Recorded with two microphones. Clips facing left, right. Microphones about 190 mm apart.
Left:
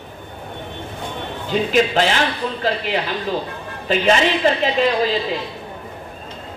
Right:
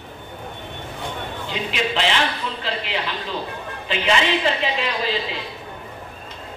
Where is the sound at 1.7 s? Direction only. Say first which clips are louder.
Left 5 dB; 45° left (ahead or behind).